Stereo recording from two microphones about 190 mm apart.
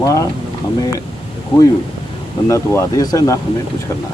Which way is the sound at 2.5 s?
15° left (ahead or behind).